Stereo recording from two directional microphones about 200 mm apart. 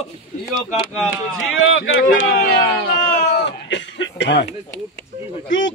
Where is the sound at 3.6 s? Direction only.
65° left (ahead or behind).